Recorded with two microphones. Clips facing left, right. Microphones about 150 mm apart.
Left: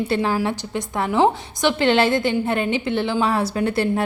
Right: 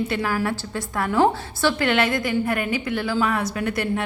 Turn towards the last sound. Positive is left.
turn(degrees=30)  # may be behind; listen again after turning